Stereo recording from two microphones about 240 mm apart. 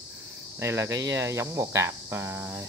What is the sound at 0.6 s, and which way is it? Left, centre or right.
Speech, centre.